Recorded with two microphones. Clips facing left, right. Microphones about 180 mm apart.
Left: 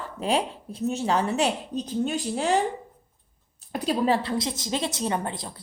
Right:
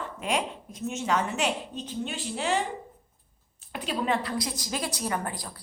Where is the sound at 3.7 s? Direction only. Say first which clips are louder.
Left 5 dB; 40° left (ahead or behind).